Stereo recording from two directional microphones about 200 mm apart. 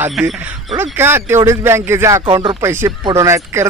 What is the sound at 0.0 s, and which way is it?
A man's voice, 5° right (ahead or behind).